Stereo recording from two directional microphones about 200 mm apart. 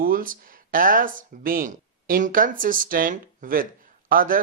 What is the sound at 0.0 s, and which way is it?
Speech, 45° right (ahead or behind).